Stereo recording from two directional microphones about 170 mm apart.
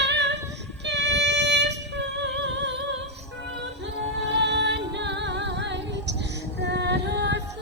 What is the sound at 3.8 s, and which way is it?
Music, 90° right.